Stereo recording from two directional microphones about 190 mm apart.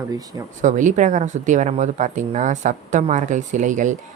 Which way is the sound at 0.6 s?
40° right (ahead or behind).